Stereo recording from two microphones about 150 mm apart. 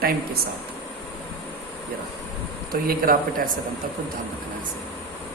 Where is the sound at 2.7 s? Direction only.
75° right (ahead or behind).